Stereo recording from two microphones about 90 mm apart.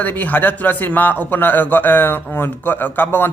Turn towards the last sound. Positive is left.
turn(degrees=25)  # may be behind; listen again after turning